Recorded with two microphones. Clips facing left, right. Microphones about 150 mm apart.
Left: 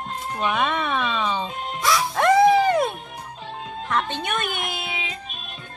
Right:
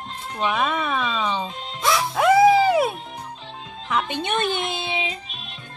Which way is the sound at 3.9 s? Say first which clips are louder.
Right 1 dB; 5° right (ahead or behind).